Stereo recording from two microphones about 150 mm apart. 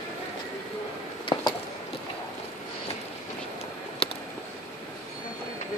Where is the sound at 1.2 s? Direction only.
30° left (ahead or behind).